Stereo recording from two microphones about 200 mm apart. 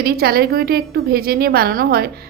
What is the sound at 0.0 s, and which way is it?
A woman's voice, 50° right (ahead or behind).